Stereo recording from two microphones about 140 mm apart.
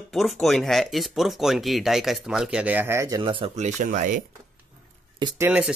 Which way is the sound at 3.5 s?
55° right (ahead or behind).